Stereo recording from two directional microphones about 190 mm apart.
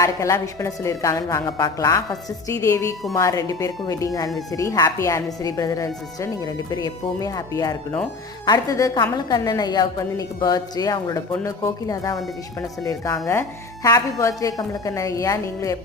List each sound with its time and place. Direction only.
0.0 s a woman's voice: 15° left (ahead or behind)